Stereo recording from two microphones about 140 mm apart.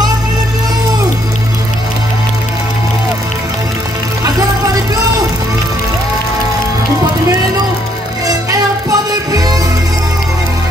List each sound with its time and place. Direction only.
8.3 s music: 25° right (ahead or behind)